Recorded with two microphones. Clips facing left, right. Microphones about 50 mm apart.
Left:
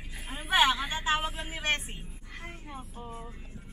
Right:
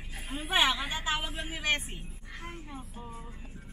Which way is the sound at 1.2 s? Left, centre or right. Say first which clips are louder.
Left 1 dB; centre.